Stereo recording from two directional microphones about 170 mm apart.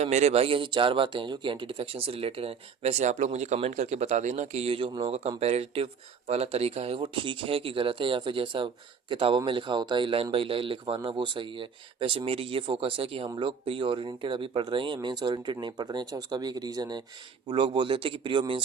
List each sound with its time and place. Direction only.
0.0 s speech: 40° right (ahead or behind)